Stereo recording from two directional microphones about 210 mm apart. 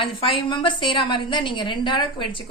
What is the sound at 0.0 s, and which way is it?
A woman's voice, 25° left (ahead or behind).